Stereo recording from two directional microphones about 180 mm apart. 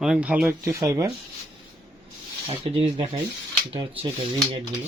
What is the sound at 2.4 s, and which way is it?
Speech, 35° right (ahead or behind).